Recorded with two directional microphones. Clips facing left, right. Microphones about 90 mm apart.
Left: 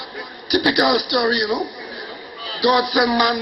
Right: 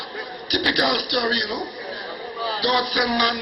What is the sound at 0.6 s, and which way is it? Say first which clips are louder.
Speech: left 4 dB; 20° left (ahead or behind).